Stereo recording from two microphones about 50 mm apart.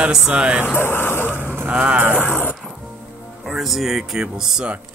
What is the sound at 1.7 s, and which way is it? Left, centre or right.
Speech, right.